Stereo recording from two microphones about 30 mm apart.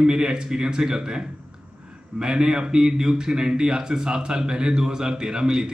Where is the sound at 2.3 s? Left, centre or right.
Right.